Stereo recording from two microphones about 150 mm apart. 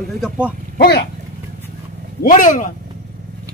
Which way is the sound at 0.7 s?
90° left.